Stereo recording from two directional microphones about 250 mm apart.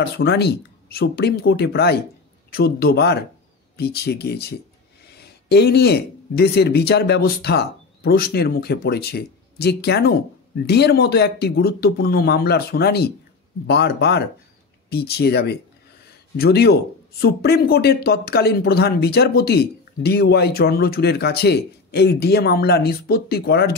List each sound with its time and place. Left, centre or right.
0.0 s speech: left